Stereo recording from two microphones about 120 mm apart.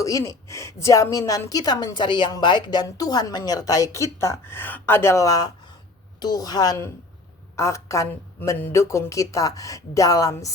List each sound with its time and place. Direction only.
0.0 s a woman's voice: 25° left (ahead or behind)